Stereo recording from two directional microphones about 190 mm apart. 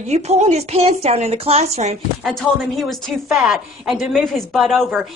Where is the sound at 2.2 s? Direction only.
Centre (ahead or behind).